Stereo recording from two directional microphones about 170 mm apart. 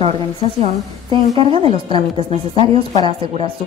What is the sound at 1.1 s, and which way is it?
Speech, 30° right (ahead or behind).